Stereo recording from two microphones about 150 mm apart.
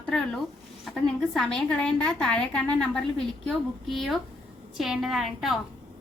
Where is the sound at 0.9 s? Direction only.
Centre (ahead or behind).